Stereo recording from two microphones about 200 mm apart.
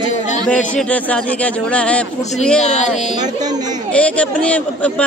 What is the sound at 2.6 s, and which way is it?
Speech, 35° left (ahead or behind).